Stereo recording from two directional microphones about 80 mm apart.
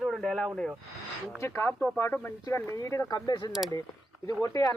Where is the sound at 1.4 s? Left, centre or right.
Left.